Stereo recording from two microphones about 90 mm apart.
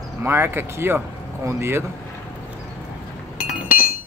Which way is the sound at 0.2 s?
25° right (ahead or behind).